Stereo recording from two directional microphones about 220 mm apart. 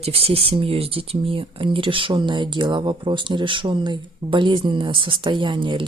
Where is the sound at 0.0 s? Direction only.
25° right (ahead or behind).